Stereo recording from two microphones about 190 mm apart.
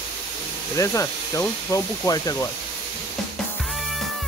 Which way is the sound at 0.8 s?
15° left (ahead or behind).